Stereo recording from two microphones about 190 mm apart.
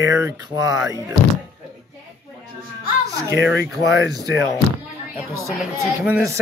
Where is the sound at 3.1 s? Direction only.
15° right (ahead or behind).